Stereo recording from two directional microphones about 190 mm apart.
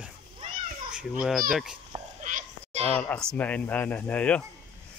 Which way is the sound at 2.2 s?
40° right (ahead or behind).